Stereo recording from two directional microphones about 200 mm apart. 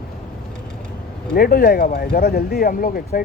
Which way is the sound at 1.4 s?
50° left (ahead or behind).